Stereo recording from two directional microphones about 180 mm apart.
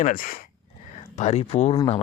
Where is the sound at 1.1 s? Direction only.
35° left (ahead or behind).